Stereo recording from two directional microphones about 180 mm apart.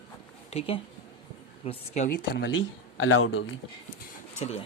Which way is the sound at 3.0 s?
90° left.